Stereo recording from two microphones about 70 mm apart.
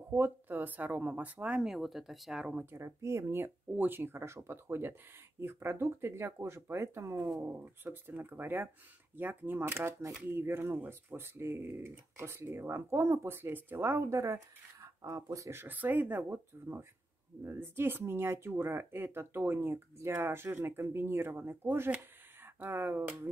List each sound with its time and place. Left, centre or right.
0.1 s speech: right
1.6 s speech: centre
2.6 s speech: right
7.4 s speech: right
15.5 s speech: right